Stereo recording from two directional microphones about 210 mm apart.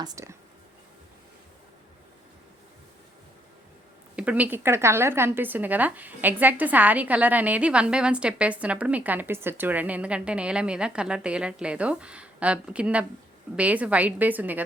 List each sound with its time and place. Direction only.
0.0 s a woman's voice: 15° right (ahead or behind)
4.1 s a woman's voice: 5° right (ahead or behind)